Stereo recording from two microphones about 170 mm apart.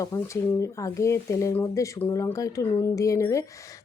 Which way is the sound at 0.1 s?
15° left (ahead or behind).